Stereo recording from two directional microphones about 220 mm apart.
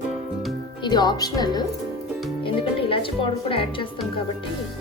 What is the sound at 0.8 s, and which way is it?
Speech, 20° left (ahead or behind).